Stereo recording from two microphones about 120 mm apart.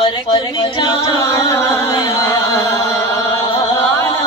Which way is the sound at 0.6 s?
40° left (ahead or behind).